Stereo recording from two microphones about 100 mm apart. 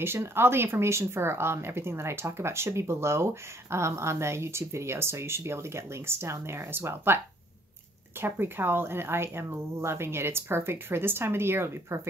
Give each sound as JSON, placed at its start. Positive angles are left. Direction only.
{"t": 0.0, "sound": "speech", "side_deg": -25}
{"t": 8.2, "sound": "speech", "side_deg": -25}